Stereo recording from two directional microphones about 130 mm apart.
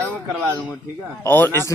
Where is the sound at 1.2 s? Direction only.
15° left (ahead or behind).